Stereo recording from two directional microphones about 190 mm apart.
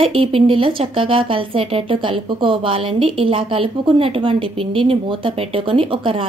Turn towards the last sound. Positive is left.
turn(degrees=-25)  # may be behind; listen again after turning